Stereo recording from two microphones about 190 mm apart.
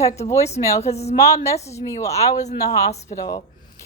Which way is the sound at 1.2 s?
15° left (ahead or behind).